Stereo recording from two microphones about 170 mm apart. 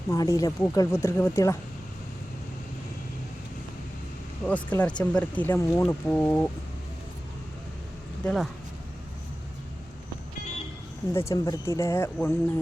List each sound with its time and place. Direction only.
0.1 s speech: 20° left (ahead or behind)
4.4 s speech: 10° left (ahead or behind)
8.2 s speech: centre (ahead or behind)
11.1 s speech: 15° left (ahead or behind)